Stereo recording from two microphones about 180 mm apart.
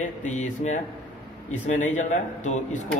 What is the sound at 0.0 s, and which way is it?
Speech, 45° left (ahead or behind).